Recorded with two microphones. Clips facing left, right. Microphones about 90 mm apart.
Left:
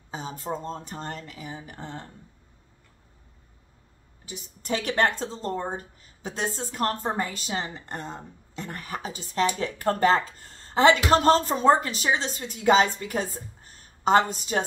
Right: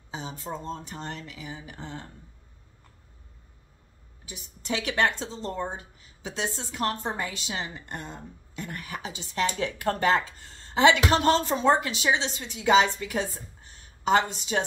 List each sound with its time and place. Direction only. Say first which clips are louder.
0.1 s speech: left 3 dB; 45° left (ahead or behind)
4.3 s a woman's voice: left 2 dB; 40° left (ahead or behind)